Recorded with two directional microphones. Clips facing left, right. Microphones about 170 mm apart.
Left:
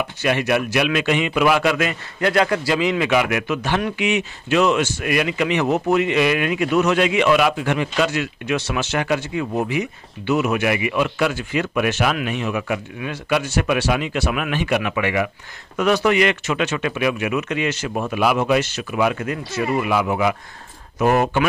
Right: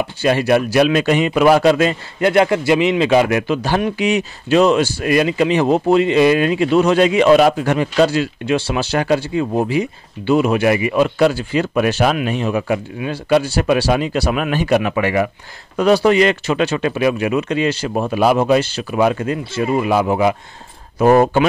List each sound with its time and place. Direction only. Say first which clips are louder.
0.0 s speech: right 4 dB; 30° right (ahead or behind)